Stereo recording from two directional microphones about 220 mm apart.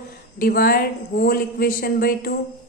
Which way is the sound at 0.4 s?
45° left (ahead or behind).